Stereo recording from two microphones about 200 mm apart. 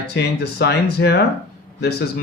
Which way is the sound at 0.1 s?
55° left (ahead or behind).